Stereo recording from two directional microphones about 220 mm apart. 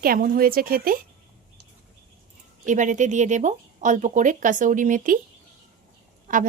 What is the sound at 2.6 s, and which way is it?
A woman's voice, 35° right (ahead or behind).